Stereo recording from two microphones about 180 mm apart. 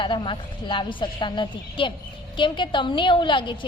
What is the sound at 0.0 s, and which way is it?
A woman's voice, 25° left (ahead or behind).